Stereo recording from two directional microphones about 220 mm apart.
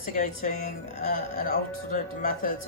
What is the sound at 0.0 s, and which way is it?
Speech, 35° left (ahead or behind).